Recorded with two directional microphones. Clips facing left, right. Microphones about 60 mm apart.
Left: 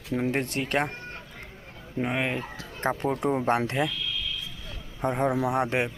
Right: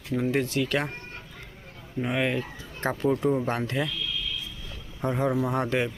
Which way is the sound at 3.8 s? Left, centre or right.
Left.